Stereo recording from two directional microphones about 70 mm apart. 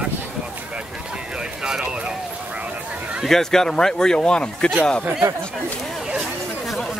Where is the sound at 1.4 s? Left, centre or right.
Centre.